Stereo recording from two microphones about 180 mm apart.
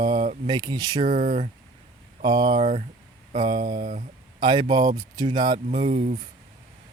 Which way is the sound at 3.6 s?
45° right (ahead or behind).